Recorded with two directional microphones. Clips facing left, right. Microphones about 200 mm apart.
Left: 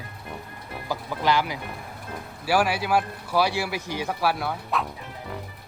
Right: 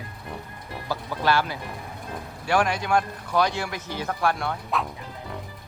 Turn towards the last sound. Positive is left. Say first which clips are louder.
# even
turn(degrees=0)  # may be behind; listen again after turning